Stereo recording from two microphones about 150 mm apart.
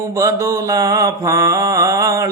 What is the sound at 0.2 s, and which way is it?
Mantra, 20° right (ahead or behind).